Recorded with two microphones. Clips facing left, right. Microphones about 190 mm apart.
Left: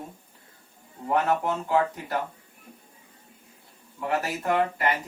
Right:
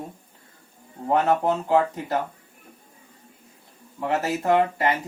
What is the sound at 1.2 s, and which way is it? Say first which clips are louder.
Speech: right 4 dB; 30° right (ahead or behind).